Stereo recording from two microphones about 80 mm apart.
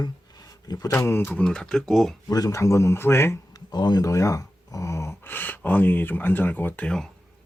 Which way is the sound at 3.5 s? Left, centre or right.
Left.